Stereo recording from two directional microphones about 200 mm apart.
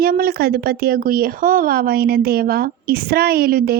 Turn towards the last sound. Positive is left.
turn(degrees=-50)  # may be behind; listen again after turning